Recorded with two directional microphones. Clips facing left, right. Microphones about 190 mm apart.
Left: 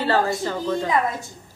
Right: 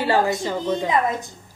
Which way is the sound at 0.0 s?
15° right (ahead or behind).